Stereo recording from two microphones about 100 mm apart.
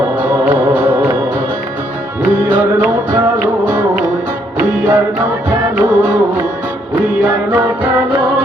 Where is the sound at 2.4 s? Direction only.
20° right (ahead or behind).